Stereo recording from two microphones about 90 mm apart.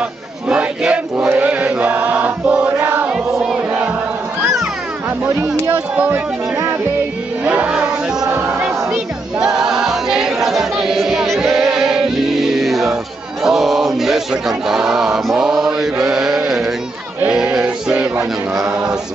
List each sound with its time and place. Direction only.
0.5 s a sound: 10° right (ahead or behind)
1.3 s chant: 15° right (ahead or behind)
5.6 s speech: 20° right (ahead or behind)
7.4 s music: 15° right (ahead or behind)
8.4 s choir: 10° right (ahead or behind)
17.3 s sheep: 10° right (ahead or behind)